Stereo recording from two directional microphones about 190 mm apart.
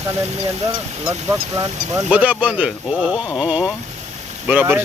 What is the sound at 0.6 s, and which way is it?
Speech, 15° right (ahead or behind).